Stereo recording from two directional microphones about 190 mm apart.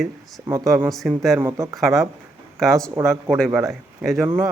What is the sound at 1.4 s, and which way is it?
Speech, 15° right (ahead or behind).